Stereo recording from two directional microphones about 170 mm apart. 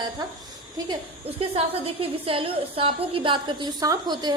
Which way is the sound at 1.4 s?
35° right (ahead or behind).